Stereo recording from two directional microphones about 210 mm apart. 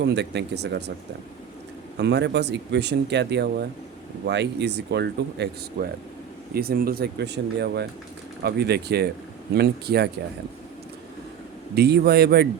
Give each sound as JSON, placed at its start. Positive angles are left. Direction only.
{"t": 0.0, "sound": "speech", "side_deg": -55}
{"t": 2.0, "sound": "speech", "side_deg": -55}
{"t": 11.7, "sound": "speech", "side_deg": -50}